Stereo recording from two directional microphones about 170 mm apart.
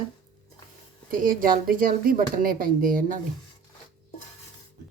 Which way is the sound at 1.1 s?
55° right (ahead or behind).